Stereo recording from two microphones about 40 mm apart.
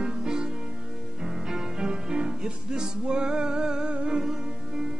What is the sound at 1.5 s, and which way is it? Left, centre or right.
Music, centre.